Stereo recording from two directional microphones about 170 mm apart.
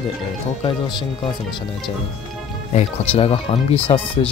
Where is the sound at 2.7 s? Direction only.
40° left (ahead or behind).